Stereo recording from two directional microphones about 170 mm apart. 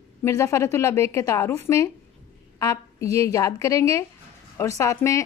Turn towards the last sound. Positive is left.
turn(degrees=15)  # may be behind; listen again after turning